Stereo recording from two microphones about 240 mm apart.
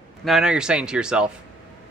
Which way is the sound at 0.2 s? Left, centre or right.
Centre.